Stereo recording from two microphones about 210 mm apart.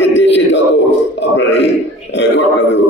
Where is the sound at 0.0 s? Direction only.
60° left (ahead or behind).